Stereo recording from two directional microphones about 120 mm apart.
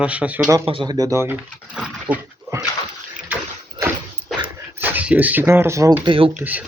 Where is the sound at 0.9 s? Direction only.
25° right (ahead or behind).